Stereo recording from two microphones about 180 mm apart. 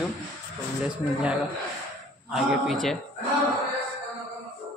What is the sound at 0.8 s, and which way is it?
Speech, 5° right (ahead or behind).